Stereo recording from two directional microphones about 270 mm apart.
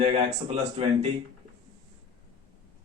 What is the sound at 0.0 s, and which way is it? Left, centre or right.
Speech, right.